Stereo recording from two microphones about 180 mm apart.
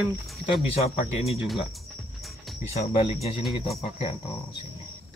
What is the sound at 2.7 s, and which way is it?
Speech, 35° left (ahead or behind).